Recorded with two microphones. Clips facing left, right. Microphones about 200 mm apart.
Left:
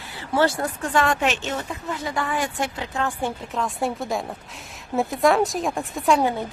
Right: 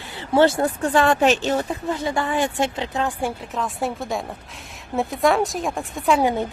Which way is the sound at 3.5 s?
Centre (ahead or behind).